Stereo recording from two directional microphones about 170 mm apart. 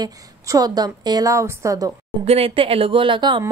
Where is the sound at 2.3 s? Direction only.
35° right (ahead or behind).